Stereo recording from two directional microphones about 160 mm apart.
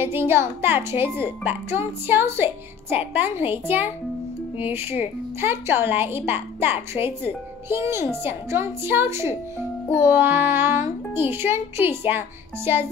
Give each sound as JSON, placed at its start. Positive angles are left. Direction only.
{"t": 0.0, "sound": "speech", "side_deg": -15}